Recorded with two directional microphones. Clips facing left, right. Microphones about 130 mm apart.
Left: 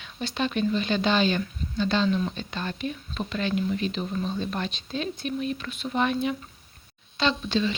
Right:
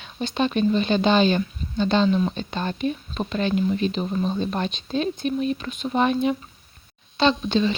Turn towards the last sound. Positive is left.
turn(degrees=-30)  # may be behind; listen again after turning